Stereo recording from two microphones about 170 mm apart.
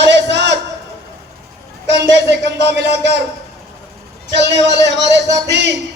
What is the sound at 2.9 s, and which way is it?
Speech, 90° right.